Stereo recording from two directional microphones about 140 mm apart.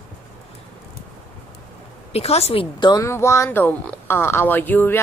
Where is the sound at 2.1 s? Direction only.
45° left (ahead or behind).